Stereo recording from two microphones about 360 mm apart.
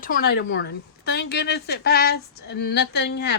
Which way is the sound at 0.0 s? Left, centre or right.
Left.